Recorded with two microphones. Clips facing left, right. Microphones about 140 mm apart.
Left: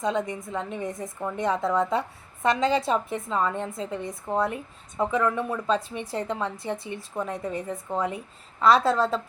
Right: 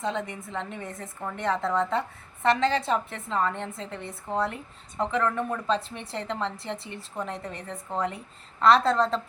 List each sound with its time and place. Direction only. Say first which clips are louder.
0.0 s a woman's voice: left 4 dB; 15° left (ahead or behind)